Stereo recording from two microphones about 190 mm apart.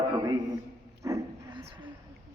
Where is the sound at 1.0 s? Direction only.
15° right (ahead or behind).